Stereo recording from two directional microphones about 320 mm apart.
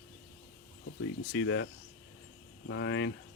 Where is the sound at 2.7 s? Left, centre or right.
Left.